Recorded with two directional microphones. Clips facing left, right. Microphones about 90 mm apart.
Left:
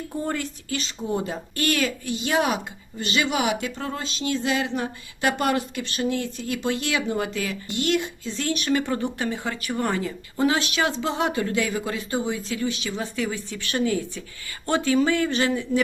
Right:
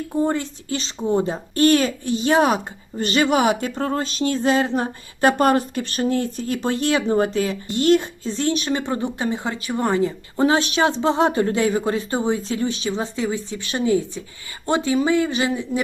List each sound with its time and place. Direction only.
0.2 s speech: 25° right (ahead or behind)